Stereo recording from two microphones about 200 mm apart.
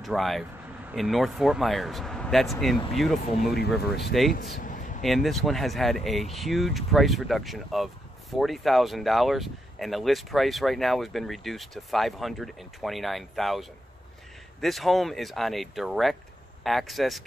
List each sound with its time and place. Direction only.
0.0 s speech: centre (ahead or behind)
4.3 s a sound: 45° left (ahead or behind)
5.0 s speech: centre (ahead or behind)